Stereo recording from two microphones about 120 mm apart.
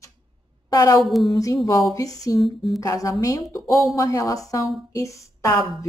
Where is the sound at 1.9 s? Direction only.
30° left (ahead or behind).